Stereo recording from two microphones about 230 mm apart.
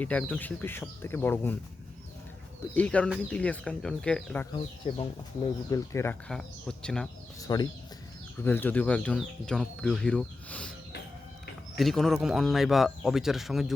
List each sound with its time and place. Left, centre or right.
0.0 s speech: centre
2.7 s speech: centre
4.5 s speech: left
5.9 s speech: centre
7.4 s speech: centre
11.8 s speech: centre